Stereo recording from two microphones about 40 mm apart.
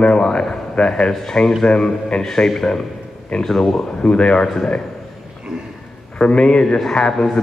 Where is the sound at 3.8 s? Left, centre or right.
Left.